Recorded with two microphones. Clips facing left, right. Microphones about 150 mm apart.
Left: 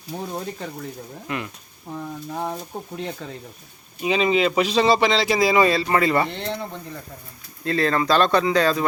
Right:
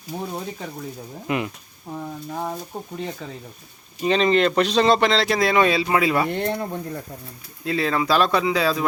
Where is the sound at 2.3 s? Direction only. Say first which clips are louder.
Left 1 dB; centre (ahead or behind).